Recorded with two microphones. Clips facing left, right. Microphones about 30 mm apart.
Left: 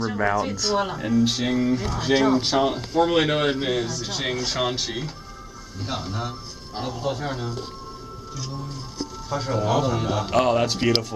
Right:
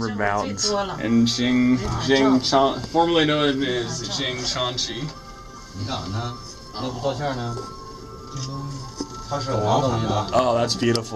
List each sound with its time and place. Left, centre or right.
0.0 s speech: centre
0.9 s speech: centre
9.5 s speech: centre
10.3 s speech: centre